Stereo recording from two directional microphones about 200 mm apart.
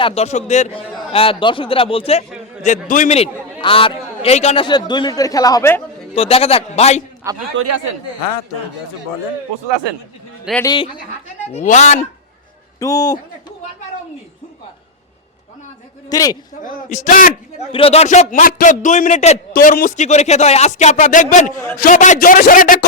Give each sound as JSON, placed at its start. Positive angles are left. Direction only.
{"t": 0.0, "sound": "a man's voice", "side_deg": 30}
{"t": 6.1, "sound": "a man's voice", "side_deg": 30}
{"t": 7.3, "sound": "a man's voice", "side_deg": -15}
{"t": 10.6, "sound": "a man's voice", "side_deg": 20}
{"t": 11.5, "sound": "speech", "side_deg": 35}
{"t": 12.8, "sound": "a man's voice", "side_deg": 20}
{"t": 16.0, "sound": "a man's voice", "side_deg": 20}
{"t": 16.6, "sound": "speech", "side_deg": 40}
{"t": 17.7, "sound": "speech", "side_deg": 30}
{"t": 19.5, "sound": "a man's voice", "side_deg": 45}